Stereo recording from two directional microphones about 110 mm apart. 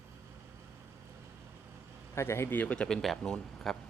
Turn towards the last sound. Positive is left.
turn(degrees=5)  # may be behind; listen again after turning